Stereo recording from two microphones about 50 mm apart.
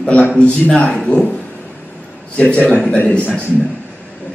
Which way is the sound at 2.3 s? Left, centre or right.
Left.